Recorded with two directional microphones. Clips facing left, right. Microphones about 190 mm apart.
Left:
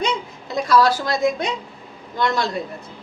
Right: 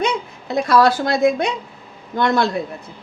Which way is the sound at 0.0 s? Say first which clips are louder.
Right 2 dB; 60° right (ahead or behind).